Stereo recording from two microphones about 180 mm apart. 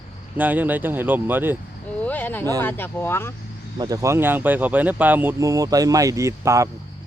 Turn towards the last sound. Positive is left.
turn(degrees=-15)  # may be behind; listen again after turning